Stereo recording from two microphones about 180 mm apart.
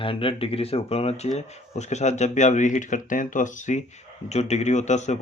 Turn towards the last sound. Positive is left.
turn(degrees=40)  # may be behind; listen again after turning